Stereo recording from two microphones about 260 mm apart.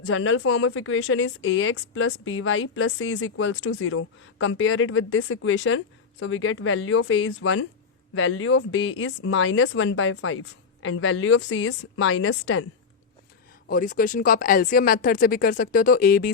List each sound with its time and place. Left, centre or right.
0.0 s a woman's voice: left
13.7 s speech: left